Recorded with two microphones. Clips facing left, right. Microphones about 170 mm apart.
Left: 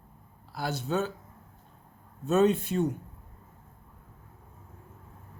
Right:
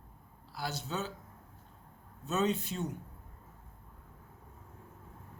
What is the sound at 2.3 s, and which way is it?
Speech, 55° left (ahead or behind).